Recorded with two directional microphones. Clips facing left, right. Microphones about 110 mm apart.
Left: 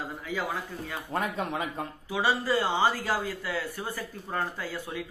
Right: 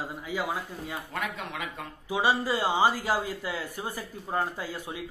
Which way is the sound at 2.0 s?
15° right (ahead or behind).